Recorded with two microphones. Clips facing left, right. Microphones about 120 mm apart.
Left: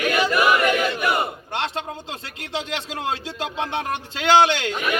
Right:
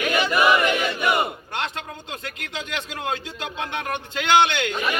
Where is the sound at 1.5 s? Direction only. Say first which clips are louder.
Left 7 dB; 25° left (ahead or behind).